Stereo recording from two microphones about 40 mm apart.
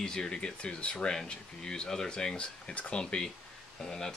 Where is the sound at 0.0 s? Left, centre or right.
Centre.